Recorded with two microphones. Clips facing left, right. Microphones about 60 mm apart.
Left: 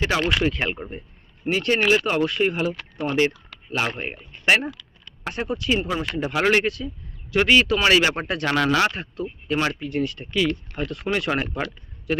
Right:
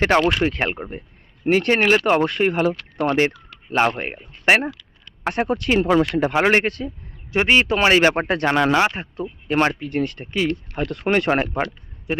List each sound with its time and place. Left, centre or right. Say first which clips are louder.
0.0 s speech: right 5 dB; right
4.1 s speech: right 3 dB; right
5.2 s speech: right 5 dB; right
5.8 s speech: right 9 dB; right
6.5 s speech: right 2 dB; right
7.3 s speech: right 1 dB; right
8.5 s speech: right 1 dB; right